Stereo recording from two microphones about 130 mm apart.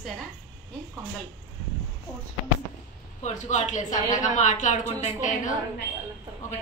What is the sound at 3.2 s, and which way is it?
A woman's voice, 65° left (ahead or behind).